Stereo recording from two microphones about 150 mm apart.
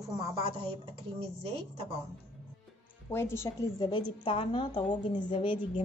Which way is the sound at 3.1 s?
15° left (ahead or behind).